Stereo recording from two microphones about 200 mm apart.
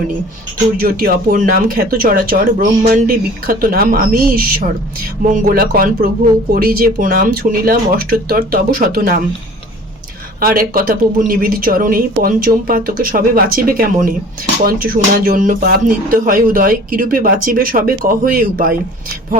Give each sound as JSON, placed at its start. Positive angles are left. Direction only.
{"t": 0.8, "sound": "speech", "side_deg": -45}
{"t": 10.4, "sound": "speech", "side_deg": -45}